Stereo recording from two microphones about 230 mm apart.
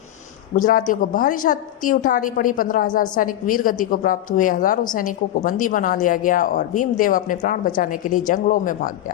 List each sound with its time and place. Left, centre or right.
0.5 s a woman's voice: left